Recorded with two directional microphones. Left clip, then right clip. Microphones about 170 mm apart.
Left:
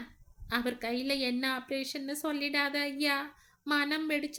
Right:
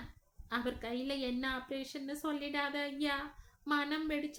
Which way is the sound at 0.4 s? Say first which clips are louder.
Left 5 dB; 25° left (ahead or behind).